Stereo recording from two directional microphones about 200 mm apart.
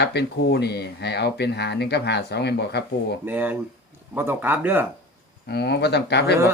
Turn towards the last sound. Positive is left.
turn(degrees=55)  # may be behind; listen again after turning